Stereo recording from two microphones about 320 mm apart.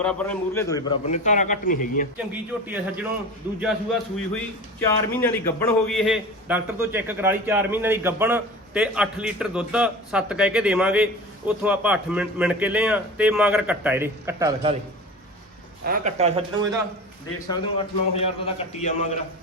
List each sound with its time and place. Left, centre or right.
0.0 s a man's voice: centre
1.0 s a man's voice: left
2.1 s a man's voice: centre
15.9 s speech: right
17.5 s a man's voice: centre